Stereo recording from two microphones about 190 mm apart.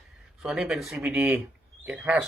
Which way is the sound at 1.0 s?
15° right (ahead or behind).